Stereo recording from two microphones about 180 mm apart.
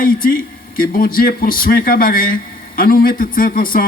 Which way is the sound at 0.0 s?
50° left (ahead or behind).